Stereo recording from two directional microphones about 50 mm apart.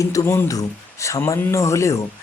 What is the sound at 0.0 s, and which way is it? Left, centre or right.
Speech, left.